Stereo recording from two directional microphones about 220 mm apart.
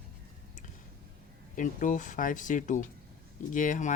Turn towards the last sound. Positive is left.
turn(degrees=35)  # may be behind; listen again after turning